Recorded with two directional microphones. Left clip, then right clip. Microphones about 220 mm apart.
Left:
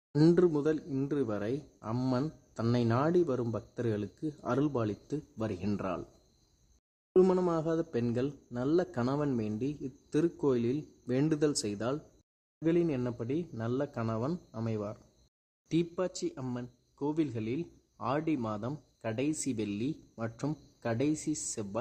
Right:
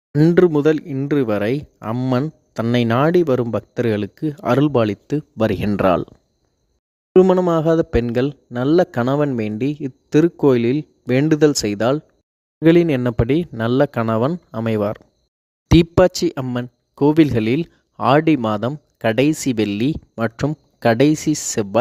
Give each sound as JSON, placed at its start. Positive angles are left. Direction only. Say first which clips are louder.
{"t": 0.1, "sound": "speech", "louder": "right 12 dB", "side_deg": -35}
{"t": 7.1, "sound": "a man's voice", "louder": "right 13 dB", "side_deg": -35}